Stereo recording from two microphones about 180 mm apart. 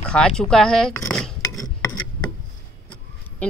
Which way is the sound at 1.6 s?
20° left (ahead or behind).